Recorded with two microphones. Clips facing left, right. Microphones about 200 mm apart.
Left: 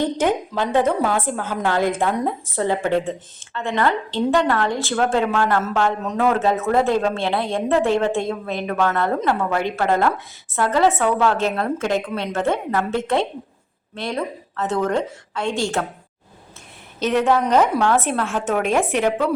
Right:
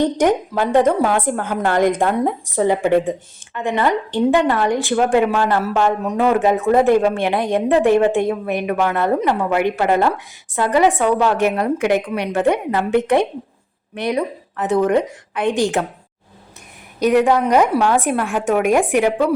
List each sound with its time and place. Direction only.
0.2 s a woman's voice: 10° right (ahead or behind)
17.0 s a woman's voice: 10° right (ahead or behind)